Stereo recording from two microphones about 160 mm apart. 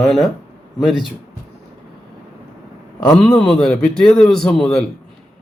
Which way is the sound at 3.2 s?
5° left (ahead or behind).